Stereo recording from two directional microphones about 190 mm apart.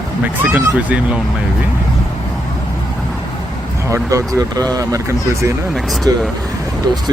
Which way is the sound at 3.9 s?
15° right (ahead or behind).